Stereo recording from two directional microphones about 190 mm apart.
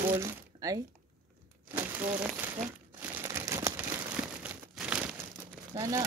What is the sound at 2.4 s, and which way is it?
Speech, 10° right (ahead or behind).